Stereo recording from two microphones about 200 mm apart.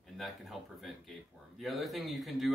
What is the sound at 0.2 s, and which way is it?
Speech, centre (ahead or behind).